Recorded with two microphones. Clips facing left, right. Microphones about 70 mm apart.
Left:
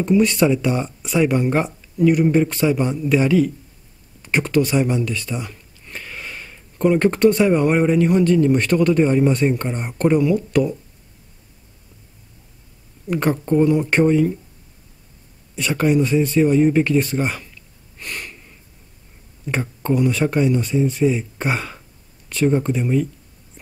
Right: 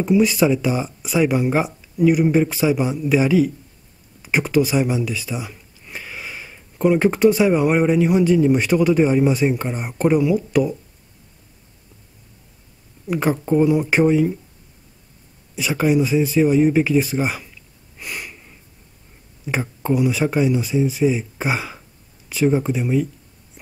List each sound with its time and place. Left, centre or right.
0.0 s speech: centre
13.0 s speech: centre
15.5 s speech: centre
17.9 s a sound: centre
19.4 s speech: centre